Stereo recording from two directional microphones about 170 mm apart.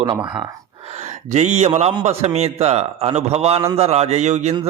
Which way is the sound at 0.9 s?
40° right (ahead or behind).